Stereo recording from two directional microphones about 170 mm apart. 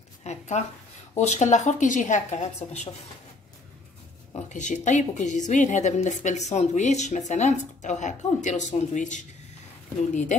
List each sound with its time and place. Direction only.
0.2 s a sound: 40° left (ahead or behind)
1.1 s a woman's voice: 45° left (ahead or behind)
4.5 s a woman's voice: 45° left (ahead or behind)